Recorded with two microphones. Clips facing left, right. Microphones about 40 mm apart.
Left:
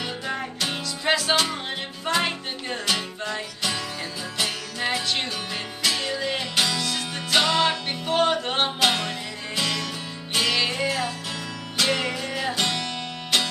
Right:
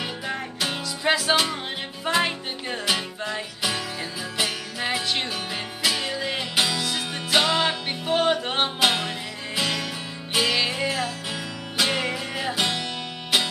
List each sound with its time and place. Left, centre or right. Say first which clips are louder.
0.3 s music: even; centre